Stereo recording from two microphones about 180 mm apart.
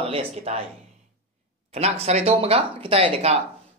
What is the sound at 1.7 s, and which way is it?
Speech, 35° right (ahead or behind).